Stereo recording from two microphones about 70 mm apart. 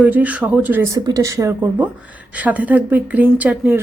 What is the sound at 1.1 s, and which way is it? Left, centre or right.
Speech, right.